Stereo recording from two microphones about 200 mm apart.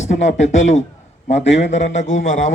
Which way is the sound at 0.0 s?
35° left (ahead or behind).